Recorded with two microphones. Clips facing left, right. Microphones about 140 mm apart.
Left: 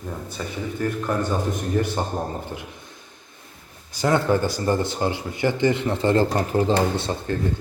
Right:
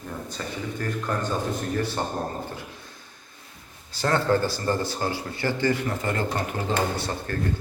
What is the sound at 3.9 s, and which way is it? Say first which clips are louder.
A man's voice: left 3 dB; 15° left (ahead or behind).